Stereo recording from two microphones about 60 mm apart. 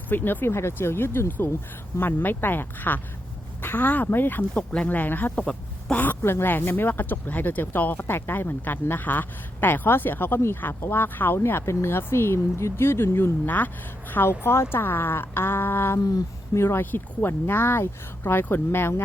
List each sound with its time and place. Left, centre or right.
0.1 s speech: left
0.4 s speech: left
5.3 s speech: centre
6.0 s speech: left
11.6 s speech: left
16.8 s speech: left